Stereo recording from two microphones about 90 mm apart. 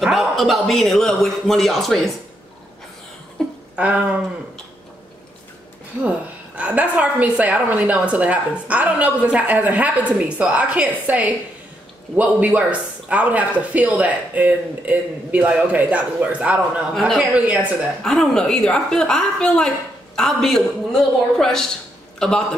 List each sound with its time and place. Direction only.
0.0 s a man's voice: centre (ahead or behind)
3.4 s a sound: 5° left (ahead or behind)
3.7 s a woman's voice: 15° right (ahead or behind)
6.0 s a woman's voice: 15° right (ahead or behind)
18.0 s a woman's voice: 5° left (ahead or behind)